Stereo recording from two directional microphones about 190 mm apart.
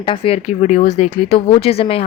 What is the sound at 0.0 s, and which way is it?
Speech, 30° left (ahead or behind).